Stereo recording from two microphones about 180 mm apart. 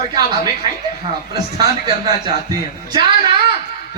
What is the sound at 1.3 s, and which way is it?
A man's voice, 20° right (ahead or behind).